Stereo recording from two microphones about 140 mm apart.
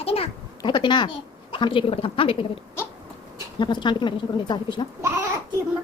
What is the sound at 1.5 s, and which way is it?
A woman's voice, 35° left (ahead or behind).